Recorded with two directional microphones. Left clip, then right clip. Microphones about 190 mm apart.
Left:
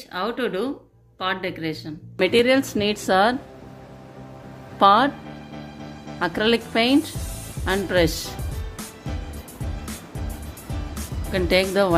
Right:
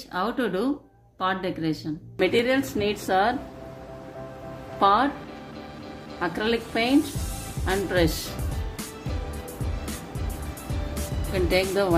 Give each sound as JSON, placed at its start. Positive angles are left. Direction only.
{"t": 0.1, "sound": "speech", "side_deg": -15}
{"t": 2.1, "sound": "a woman's voice", "side_deg": 40}
{"t": 4.7, "sound": "a woman's voice", "side_deg": 40}
{"t": 6.1, "sound": "a woman's voice", "side_deg": 45}
{"t": 11.3, "sound": "a woman's voice", "side_deg": 40}